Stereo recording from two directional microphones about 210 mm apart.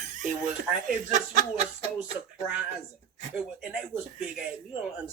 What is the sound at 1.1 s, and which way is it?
Speech, 35° right (ahead or behind).